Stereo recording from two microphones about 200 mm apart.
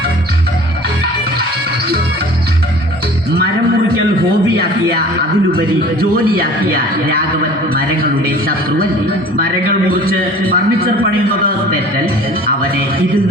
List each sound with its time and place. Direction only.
5.5 s a man's voice: 50° right (ahead or behind)
10.5 s a man's voice: 45° right (ahead or behind)